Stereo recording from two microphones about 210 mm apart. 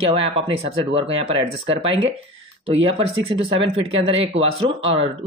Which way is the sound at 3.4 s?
25° right (ahead or behind).